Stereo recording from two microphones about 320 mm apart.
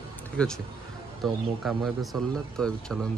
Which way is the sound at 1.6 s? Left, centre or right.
Centre.